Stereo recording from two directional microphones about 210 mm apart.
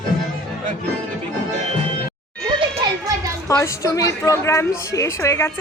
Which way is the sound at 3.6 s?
15° left (ahead or behind).